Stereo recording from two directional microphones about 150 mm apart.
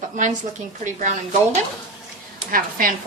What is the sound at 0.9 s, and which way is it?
Speech, 55° right (ahead or behind).